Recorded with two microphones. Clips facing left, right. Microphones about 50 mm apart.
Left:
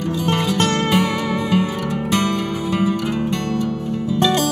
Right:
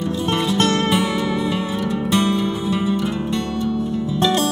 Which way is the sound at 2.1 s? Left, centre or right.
Left.